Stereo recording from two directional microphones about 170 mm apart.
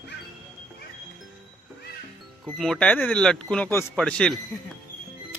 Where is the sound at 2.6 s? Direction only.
Centre (ahead or behind).